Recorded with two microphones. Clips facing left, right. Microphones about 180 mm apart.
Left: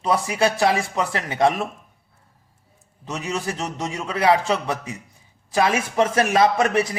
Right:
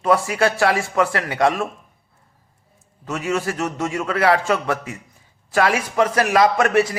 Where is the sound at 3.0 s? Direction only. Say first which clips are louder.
Right 4 dB; 20° left (ahead or behind).